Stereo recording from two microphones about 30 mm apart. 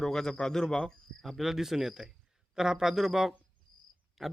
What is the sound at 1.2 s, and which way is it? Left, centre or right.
A man's voice, centre.